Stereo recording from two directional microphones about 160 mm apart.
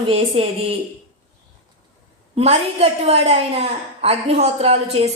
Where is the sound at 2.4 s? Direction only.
40° right (ahead or behind).